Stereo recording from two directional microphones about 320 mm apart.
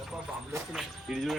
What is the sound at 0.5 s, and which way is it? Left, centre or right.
Speech, centre.